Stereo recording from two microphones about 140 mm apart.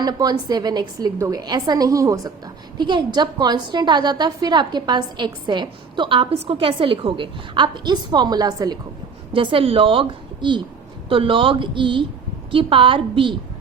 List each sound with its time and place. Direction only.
0.0 s a woman's voice: 30° right (ahead or behind)